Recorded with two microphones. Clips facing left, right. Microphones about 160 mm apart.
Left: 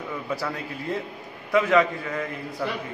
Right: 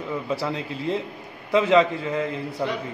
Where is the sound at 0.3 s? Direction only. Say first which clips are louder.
Right 2 dB; 25° right (ahead or behind).